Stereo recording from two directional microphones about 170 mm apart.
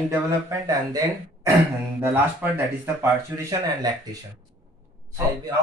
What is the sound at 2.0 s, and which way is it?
A man's voice, 10° right (ahead or behind).